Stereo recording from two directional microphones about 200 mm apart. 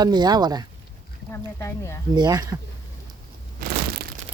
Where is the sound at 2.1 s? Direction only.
20° right (ahead or behind).